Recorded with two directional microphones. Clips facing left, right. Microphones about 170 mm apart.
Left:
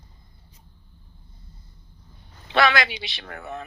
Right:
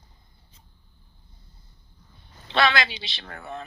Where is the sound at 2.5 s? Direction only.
25° right (ahead or behind).